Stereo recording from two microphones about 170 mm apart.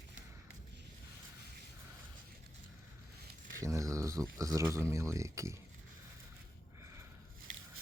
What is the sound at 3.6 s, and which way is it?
Speech, 20° right (ahead or behind).